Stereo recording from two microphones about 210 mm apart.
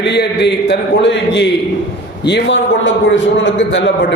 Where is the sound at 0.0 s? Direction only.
50° left (ahead or behind).